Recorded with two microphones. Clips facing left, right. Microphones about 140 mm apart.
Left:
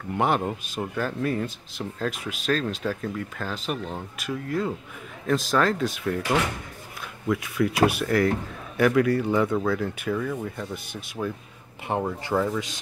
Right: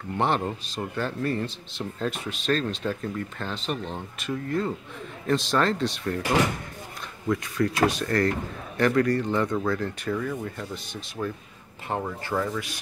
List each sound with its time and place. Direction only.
0.2 s speech: 10° left (ahead or behind)
7.2 s a man's voice: 5° left (ahead or behind)
11.9 s speech: 20° left (ahead or behind)